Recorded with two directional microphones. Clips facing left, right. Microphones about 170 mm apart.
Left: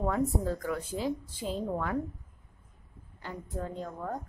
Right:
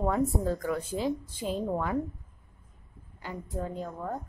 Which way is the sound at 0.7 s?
20° right (ahead or behind).